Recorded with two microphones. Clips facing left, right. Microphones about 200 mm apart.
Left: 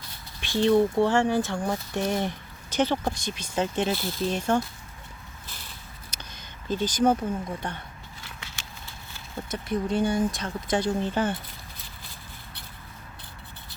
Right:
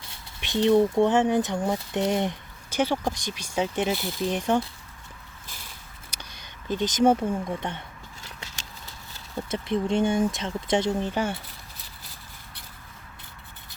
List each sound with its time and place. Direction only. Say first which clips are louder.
0.3 s speech: right 1 dB; 20° right (ahead or behind)
6.7 s speech: right 2 dB; 20° right (ahead or behind)
8.2 s a sound: right 1 dB; 40° right (ahead or behind)
9.5 s speech: right 2 dB; 25° right (ahead or behind)